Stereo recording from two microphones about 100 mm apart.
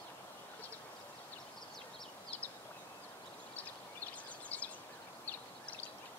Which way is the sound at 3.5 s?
15° left (ahead or behind).